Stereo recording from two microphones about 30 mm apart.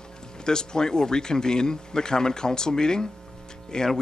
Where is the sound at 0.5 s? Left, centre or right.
Left.